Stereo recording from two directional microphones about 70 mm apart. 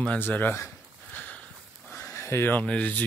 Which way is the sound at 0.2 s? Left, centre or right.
Left.